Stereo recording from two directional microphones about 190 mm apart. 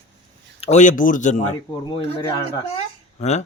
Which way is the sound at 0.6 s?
40° left (ahead or behind).